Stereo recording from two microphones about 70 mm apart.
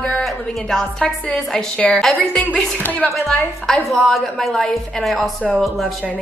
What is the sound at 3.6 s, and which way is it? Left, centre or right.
A woman's voice, centre.